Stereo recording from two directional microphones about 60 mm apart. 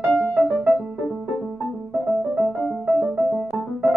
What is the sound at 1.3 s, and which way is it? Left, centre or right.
Music, centre.